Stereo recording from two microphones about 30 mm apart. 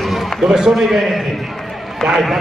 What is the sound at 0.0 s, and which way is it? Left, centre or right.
Run, centre.